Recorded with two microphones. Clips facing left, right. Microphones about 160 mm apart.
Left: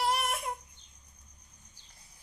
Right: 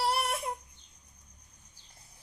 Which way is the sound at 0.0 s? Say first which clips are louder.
Even; 35° right (ahead or behind).